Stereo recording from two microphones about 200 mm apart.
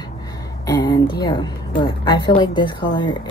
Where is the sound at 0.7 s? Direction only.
20° left (ahead or behind).